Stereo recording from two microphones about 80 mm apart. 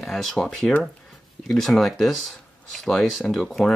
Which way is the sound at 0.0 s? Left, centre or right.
Centre.